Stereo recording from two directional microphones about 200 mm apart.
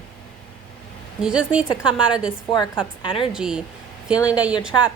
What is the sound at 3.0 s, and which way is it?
Speech, 25° left (ahead or behind).